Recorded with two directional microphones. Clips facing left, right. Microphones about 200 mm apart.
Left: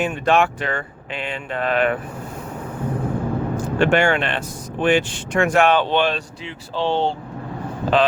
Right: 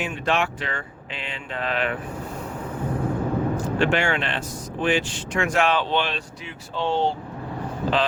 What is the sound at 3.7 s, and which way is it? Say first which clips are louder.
Speech: left 7 dB; 55° left (ahead or behind).